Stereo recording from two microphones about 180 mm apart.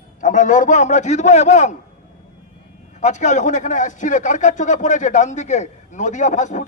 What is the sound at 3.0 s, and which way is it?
A man's voice, 40° left (ahead or behind).